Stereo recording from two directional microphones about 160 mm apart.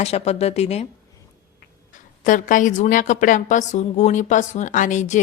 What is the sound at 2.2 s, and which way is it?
A woman's voice, 55° left (ahead or behind).